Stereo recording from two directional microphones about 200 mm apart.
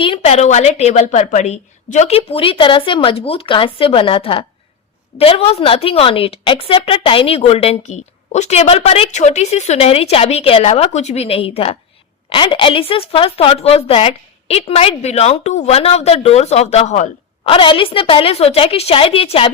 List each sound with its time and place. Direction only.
0.0 s a woman's voice: 30° left (ahead or behind)